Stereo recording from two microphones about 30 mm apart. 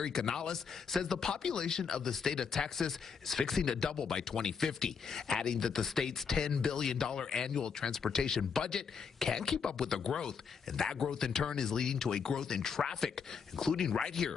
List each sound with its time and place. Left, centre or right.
0.0 s speech: centre